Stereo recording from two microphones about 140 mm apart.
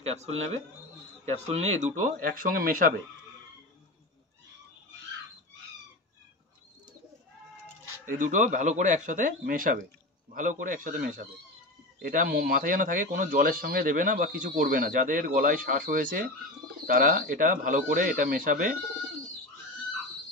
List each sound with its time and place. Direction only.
0.0 s speech: 50° right (ahead or behind)
2.0 s speech: 75° right (ahead or behind); by 2.9 s 90° right
7.6 s cat: 15° right (ahead or behind)
8.2 s speech: 65° right (ahead or behind)